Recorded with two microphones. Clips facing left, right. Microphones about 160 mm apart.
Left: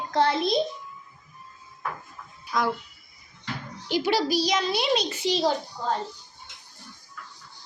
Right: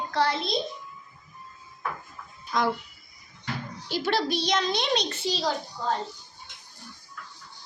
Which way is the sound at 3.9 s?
10° left (ahead or behind).